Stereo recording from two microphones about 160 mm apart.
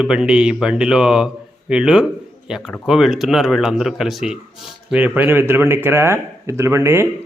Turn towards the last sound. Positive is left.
turn(degrees=-15)  # may be behind; listen again after turning